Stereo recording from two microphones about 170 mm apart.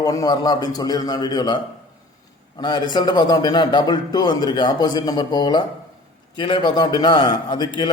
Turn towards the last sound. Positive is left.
turn(degrees=25)  # may be behind; listen again after turning